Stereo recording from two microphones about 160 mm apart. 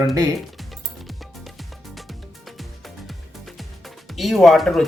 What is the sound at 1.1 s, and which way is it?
Music, centre (ahead or behind).